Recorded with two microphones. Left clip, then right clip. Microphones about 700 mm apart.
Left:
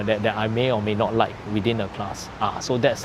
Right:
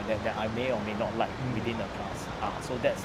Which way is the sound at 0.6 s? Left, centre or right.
Left.